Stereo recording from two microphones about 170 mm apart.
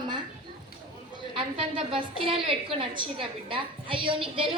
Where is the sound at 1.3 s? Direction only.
30° right (ahead or behind).